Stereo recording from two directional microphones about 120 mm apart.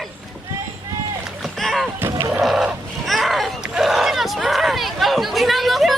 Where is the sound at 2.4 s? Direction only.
Centre (ahead or behind).